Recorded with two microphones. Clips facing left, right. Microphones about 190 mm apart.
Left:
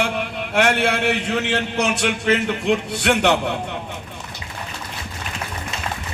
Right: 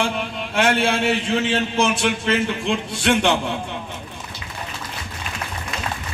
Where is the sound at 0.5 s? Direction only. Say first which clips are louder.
Even; 65° left (ahead or behind).